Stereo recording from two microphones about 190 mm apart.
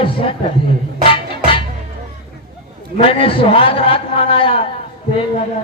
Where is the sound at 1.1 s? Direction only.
25° left (ahead or behind).